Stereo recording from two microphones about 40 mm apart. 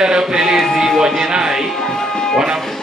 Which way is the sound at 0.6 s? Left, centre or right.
Centre.